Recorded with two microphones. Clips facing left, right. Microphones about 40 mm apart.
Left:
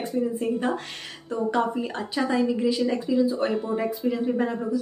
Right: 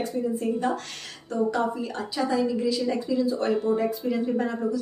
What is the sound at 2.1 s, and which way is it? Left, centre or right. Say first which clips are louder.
Speech: left 1 dB; left.